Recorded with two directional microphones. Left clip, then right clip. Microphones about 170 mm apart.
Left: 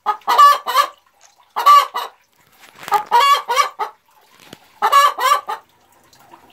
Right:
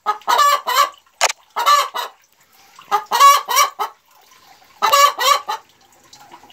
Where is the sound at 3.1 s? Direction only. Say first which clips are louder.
Right 3 dB; 60° right (ahead or behind).